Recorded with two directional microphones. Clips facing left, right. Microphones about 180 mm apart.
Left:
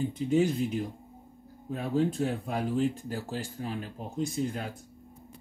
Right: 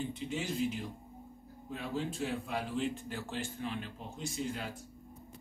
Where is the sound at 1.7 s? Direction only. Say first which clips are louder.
Left 9 dB; 45° left (ahead or behind).